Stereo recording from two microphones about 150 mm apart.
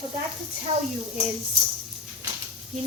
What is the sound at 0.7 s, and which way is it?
Speech, 35° right (ahead or behind).